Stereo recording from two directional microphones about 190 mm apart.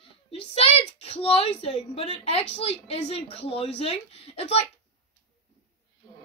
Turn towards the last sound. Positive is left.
turn(degrees=30)  # may be behind; listen again after turning